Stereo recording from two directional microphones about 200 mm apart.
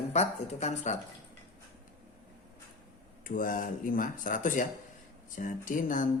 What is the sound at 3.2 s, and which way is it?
Speech, 45° left (ahead or behind).